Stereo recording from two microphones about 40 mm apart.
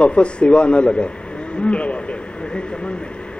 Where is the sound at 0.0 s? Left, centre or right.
Left.